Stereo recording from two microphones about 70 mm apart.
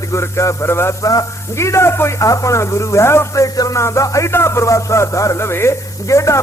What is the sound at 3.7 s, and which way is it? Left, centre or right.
Speech, left.